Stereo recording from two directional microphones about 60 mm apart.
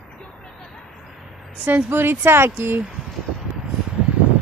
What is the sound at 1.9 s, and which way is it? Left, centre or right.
Speech, right.